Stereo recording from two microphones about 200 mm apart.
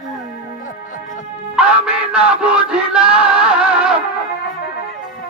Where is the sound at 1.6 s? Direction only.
5° right (ahead or behind).